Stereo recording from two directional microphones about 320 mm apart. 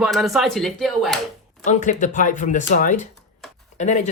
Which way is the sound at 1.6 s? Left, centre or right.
Left.